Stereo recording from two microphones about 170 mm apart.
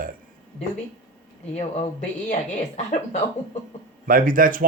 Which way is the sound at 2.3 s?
45° left (ahead or behind).